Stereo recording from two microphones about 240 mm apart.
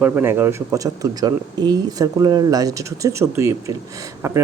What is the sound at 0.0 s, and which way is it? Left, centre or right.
Speech, centre.